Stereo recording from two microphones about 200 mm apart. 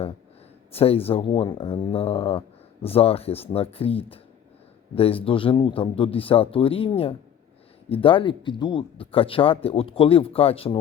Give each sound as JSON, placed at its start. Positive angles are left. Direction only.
{"t": 0.7, "sound": "speech", "side_deg": 30}